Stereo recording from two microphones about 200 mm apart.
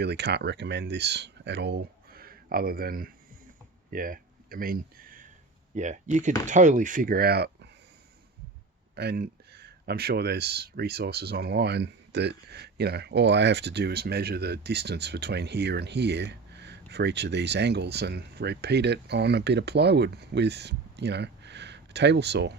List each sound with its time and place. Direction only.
0.0 s speech: 55° right (ahead or behind)
3.9 s a sound: 45° right (ahead or behind)
5.7 s speech: 35° right (ahead or behind); by 7.7 s 55° right (ahead or behind)
9.0 s speech: 50° right (ahead or behind)